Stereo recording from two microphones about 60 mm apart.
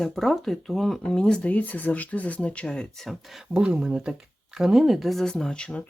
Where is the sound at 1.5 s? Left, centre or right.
Left.